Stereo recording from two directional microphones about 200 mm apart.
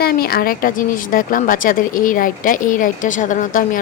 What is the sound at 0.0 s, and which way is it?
Speech, 50° left (ahead or behind).